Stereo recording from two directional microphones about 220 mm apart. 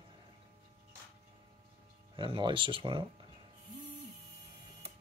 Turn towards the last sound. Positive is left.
turn(degrees=-20)  # may be behind; listen again after turning